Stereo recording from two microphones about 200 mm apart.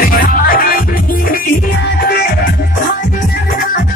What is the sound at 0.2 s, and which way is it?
Music, 45° left (ahead or behind).